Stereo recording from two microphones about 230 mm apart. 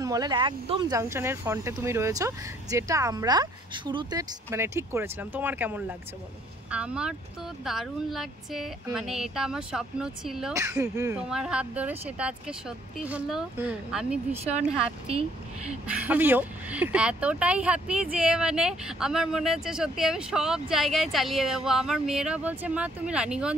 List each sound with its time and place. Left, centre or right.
0.0 s speech: centre
10.5 s speech: centre
15.9 s speech: centre